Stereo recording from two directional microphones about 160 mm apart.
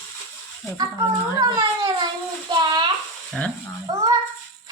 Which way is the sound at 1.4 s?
25° right (ahead or behind).